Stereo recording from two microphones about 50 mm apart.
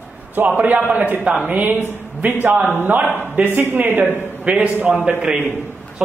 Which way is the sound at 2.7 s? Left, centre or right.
Right.